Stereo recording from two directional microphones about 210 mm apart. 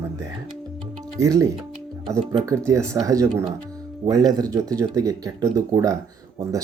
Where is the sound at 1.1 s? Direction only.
15° right (ahead or behind).